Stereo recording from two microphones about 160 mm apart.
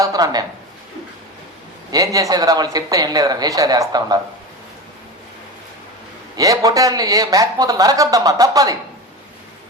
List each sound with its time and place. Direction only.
0.0 s speech: 25° right (ahead or behind)
1.9 s speech: 20° right (ahead or behind)
6.3 s speech: 20° right (ahead or behind)